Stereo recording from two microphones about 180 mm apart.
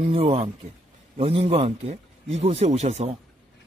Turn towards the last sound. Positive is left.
turn(degrees=-40)  # may be behind; listen again after turning